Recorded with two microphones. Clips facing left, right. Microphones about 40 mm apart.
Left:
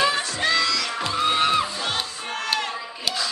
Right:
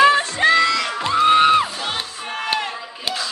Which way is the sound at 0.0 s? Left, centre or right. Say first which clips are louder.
Right 8 dB; right.